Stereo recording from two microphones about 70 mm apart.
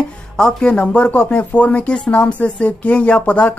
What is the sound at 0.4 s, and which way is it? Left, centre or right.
Speech, centre.